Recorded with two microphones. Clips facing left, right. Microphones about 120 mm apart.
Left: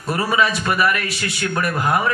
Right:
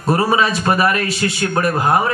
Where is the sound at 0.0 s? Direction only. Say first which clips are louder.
Right 4 dB; 35° right (ahead or behind).